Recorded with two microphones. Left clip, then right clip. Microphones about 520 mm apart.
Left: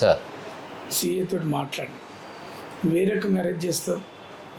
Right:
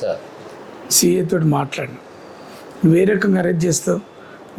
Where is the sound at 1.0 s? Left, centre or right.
Right.